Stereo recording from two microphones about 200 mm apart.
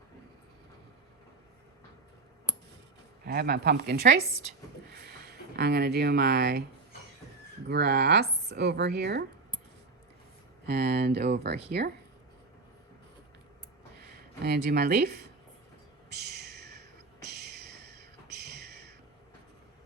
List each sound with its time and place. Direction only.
3.2 s a woman's voice: 50° right (ahead or behind)
5.3 s speech: 55° right (ahead or behind)
7.7 s speech: 55° right (ahead or behind)
10.7 s speech: 55° right (ahead or behind)
14.4 s a woman's voice: 55° right (ahead or behind)
16.1 s a sound: 55° right (ahead or behind)
17.3 s music: 55° right (ahead or behind)